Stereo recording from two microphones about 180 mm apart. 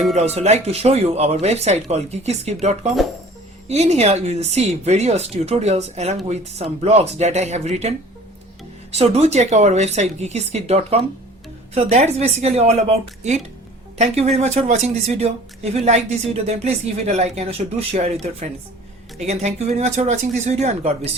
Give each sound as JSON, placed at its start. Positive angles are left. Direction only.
{"t": 0.1, "sound": "speech", "side_deg": -35}